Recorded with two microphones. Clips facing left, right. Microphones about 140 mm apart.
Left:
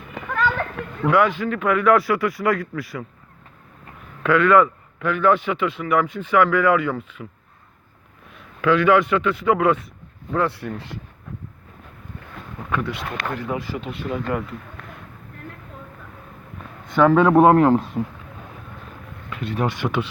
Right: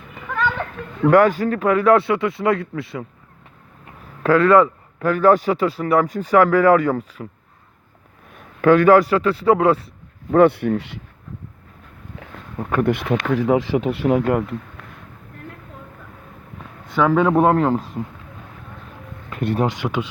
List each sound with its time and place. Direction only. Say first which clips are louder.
0.2 s children playing: left 2 dB; 90° left
0.8 s a sound: left 1 dB; 90° left
1.1 s speech: right 4 dB; 40° right (ahead or behind); by 3.1 s 25° right (ahead or behind)
4.2 s speech: right 2 dB; 35° right (ahead or behind)
8.4 s speech: right 5 dB; 45° right (ahead or behind); by 9.8 s 30° right (ahead or behind)
10.3 s speech: right 9 dB; 60° right (ahead or behind)
12.5 s speech: right 7 dB; 45° right (ahead or behind)
13.2 s speech: right 9 dB; 90° right
13.9 s speech: right 8 dB; 75° right (ahead or behind)
14.3 s speech: right 6 dB; 50° right (ahead or behind)
17.2 s speech: left 2 dB; centre (ahead or behind)
19.3 s a sound: right 7 dB; 50° right (ahead or behind)
19.6 s speech: right 1 dB; 15° right (ahead or behind)